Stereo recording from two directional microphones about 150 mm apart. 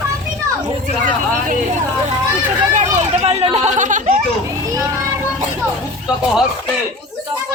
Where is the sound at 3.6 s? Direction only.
55° right (ahead or behind).